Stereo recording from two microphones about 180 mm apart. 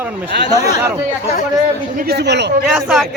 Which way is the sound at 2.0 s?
60° right (ahead or behind).